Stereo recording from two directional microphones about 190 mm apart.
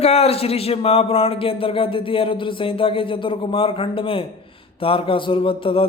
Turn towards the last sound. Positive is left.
turn(degrees=30)  # may be behind; listen again after turning